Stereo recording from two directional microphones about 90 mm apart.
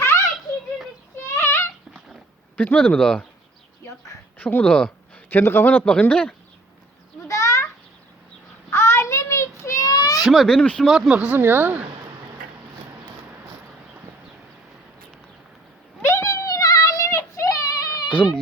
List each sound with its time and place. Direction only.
1.4 s a sound: 30° left (ahead or behind)
2.6 s speech: 15° left (ahead or behind)
4.4 s a man's voice: 20° left (ahead or behind)
5.8 s speech: 15° left (ahead or behind)
7.3 s a sound: 35° left (ahead or behind)
8.7 s child singing: 30° left (ahead or behind); by 10.2 s 45° left (ahead or behind)
10.2 s speech: centre (ahead or behind)
10.8 s speech: 5° right (ahead or behind)
11.1 s speech: 15° right (ahead or behind)
16.0 s child singing: 35° left (ahead or behind)
18.1 s speech: 15° left (ahead or behind)